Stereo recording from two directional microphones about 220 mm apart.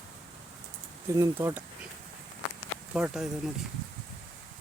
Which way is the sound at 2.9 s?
5° right (ahead or behind).